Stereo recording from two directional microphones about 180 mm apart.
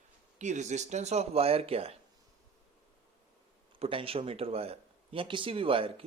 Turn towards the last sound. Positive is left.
turn(degrees=-30)  # may be behind; listen again after turning